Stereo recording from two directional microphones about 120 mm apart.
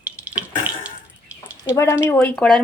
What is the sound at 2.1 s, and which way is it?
Frying, 15° left (ahead or behind).